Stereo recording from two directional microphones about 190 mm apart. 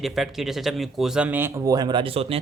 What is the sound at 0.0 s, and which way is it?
Speech, centre (ahead or behind).